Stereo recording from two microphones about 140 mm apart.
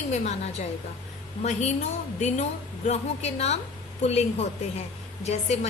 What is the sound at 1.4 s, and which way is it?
A woman's voice, 55° left (ahead or behind).